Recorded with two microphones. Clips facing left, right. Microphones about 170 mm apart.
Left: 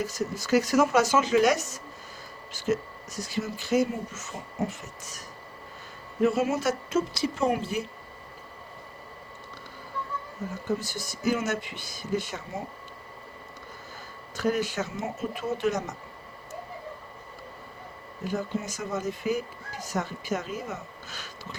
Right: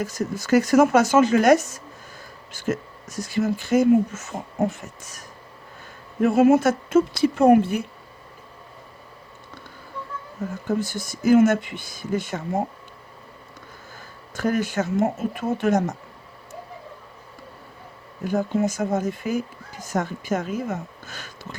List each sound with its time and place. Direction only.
0.0 s speech: 50° right (ahead or behind)
6.2 s a woman's voice: 55° right (ahead or behind)
10.7 s speech: 50° right (ahead or behind)
14.3 s speech: 50° right (ahead or behind)
18.3 s speech: 50° right (ahead or behind)